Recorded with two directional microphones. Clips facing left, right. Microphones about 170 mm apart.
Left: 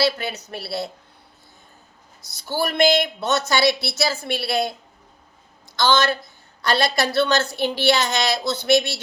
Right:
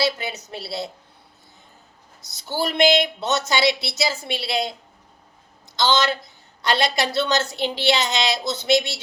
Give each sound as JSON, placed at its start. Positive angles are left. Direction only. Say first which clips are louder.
{"t": 0.0, "sound": "a woman's voice", "louder": "left 2 dB", "side_deg": -20}
{"t": 2.4, "sound": "a woman's voice", "louder": "even", "side_deg": -20}
{"t": 5.7, "sound": "a woman's voice", "louder": "left 1 dB", "side_deg": -20}